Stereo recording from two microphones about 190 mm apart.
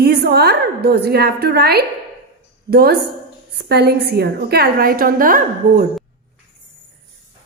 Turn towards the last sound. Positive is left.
turn(degrees=-45)  # may be behind; listen again after turning